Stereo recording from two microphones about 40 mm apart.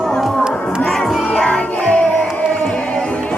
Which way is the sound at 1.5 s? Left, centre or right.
Left.